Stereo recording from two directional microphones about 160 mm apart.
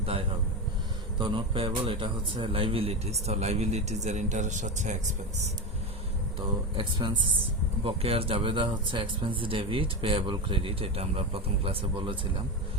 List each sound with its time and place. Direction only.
0.0 s a man's voice: 35° right (ahead or behind)
6.7 s speech: 30° right (ahead or behind)